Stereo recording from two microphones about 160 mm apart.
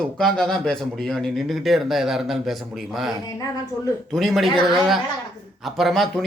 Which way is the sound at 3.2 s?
20° left (ahead or behind).